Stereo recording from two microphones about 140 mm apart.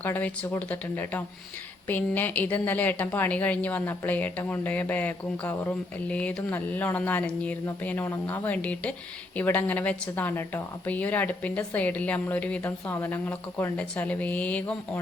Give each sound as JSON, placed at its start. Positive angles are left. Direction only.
{"t": 0.0, "sound": "a woman's voice", "side_deg": 15}